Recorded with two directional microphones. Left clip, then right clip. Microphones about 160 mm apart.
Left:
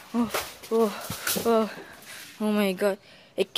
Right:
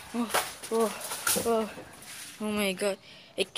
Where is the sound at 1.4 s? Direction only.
55° left (ahead or behind).